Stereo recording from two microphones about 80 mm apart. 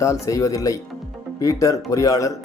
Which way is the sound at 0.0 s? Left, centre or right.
Left.